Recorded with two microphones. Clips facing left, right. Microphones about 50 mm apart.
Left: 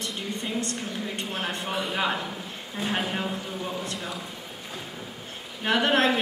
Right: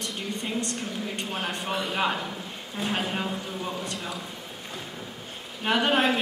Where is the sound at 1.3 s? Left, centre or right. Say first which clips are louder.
Even; centre.